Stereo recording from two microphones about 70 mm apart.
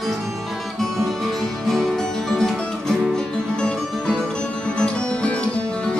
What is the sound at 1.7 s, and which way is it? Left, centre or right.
Music, centre.